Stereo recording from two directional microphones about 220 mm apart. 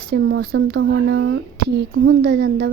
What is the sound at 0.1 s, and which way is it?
Speech, 55° right (ahead or behind).